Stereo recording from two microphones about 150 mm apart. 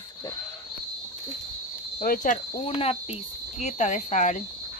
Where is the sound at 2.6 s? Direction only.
40° left (ahead or behind).